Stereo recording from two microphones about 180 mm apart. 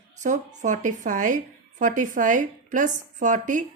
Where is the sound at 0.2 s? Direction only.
45° right (ahead or behind).